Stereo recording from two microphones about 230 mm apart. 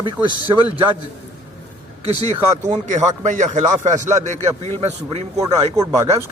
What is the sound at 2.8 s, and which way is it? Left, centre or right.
A man's voice, right.